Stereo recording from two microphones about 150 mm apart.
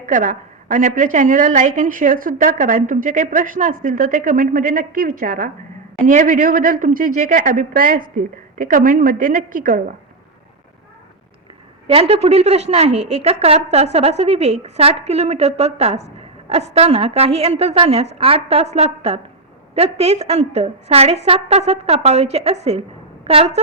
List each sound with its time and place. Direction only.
0.0 s a woman's voice: 60° right (ahead or behind)
11.9 s a woman's voice: 40° right (ahead or behind)